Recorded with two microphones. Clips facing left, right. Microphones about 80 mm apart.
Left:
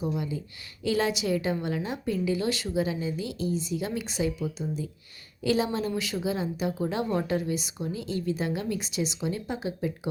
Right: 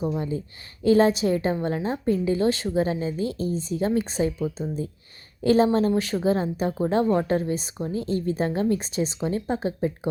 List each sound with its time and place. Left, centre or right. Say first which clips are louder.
0.0 s speech: right 4 dB; right